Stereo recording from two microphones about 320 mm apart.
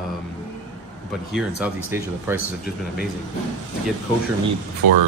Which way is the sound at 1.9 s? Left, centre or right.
Centre.